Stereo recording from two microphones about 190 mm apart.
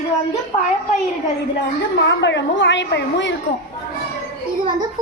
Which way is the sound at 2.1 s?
70° left (ahead or behind).